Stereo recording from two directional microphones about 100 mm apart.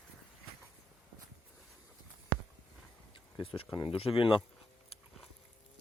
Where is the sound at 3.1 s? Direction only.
65° left (ahead or behind).